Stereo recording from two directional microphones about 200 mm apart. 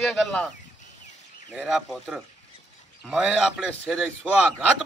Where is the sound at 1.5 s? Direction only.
5° right (ahead or behind).